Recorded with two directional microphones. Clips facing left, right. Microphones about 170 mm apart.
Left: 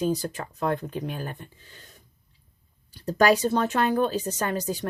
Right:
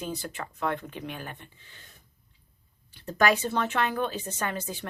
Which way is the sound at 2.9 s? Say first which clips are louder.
Left 4 dB; 35° left (ahead or behind).